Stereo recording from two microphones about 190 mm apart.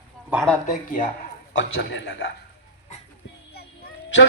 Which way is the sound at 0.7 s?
45° left (ahead or behind).